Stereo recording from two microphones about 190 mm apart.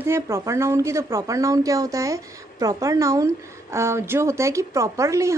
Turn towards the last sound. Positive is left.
turn(degrees=-15)  # may be behind; listen again after turning